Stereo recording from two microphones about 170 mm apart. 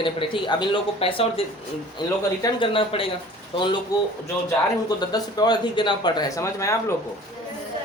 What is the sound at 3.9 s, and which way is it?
A man's voice, 20° left (ahead or behind).